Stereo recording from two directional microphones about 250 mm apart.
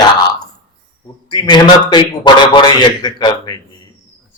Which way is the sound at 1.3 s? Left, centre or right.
Centre.